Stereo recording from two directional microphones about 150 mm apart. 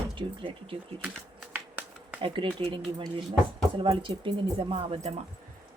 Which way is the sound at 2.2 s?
35° right (ahead or behind).